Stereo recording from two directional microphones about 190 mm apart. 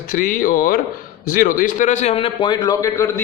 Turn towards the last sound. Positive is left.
turn(degrees=15)  # may be behind; listen again after turning